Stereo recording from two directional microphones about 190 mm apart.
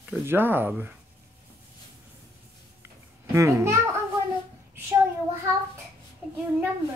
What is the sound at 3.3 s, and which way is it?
Speech, 15° right (ahead or behind).